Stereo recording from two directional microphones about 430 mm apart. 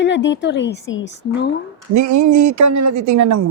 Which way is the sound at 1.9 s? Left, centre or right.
Right.